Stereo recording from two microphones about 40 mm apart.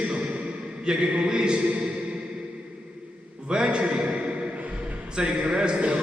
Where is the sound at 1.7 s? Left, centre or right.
Right.